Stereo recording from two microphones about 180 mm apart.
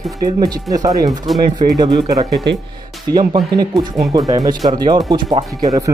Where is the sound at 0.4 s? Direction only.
20° right (ahead or behind).